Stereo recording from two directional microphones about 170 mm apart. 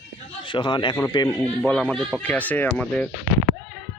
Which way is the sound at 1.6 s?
5° left (ahead or behind).